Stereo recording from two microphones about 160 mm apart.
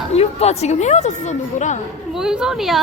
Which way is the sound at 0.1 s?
40° left (ahead or behind).